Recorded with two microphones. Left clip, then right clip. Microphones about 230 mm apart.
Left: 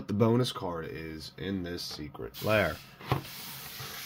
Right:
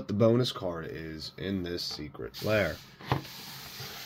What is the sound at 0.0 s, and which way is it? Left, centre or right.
Speech, centre.